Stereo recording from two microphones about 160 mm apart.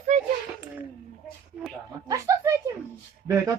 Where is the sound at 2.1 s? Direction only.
20° right (ahead or behind).